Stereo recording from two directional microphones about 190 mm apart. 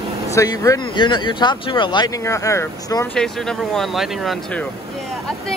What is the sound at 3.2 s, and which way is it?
Speech, 5° left (ahead or behind).